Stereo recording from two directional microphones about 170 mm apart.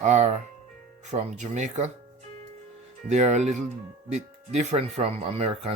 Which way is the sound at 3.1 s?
45° right (ahead or behind).